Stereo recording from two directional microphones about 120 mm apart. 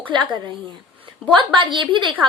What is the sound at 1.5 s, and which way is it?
Speech, 40° right (ahead or behind).